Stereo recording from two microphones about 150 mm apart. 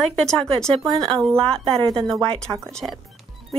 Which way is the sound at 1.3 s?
40° right (ahead or behind).